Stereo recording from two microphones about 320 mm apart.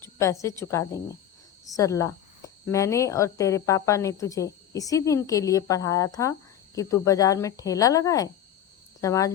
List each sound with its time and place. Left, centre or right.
0.2 s speech: centre